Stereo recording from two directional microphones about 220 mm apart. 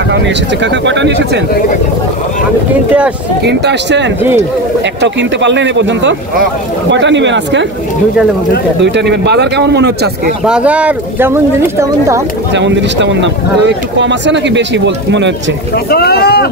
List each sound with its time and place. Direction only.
0.1 s speech: 55° right (ahead or behind)
2.7 s speech: 5° right (ahead or behind)
3.4 s speech: 50° right (ahead or behind)
8.8 s speech: 50° right (ahead or behind)
10.4 s speech: 5° right (ahead or behind)
12.5 s speech: 55° right (ahead or behind)
15.7 s speech: 45° left (ahead or behind)